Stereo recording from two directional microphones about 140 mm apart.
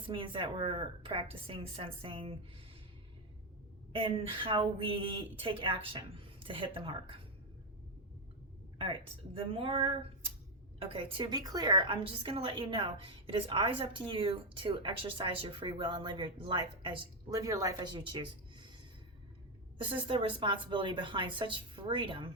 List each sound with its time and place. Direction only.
0.1 s a woman's voice: 35° right (ahead or behind)
3.9 s a woman's voice: 35° right (ahead or behind)
8.8 s a woman's voice: 40° right (ahead or behind)
19.8 s a woman's voice: 35° right (ahead or behind)